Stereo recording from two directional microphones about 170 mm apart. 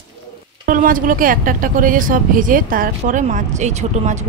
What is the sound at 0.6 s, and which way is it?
A woman's voice, 55° right (ahead or behind).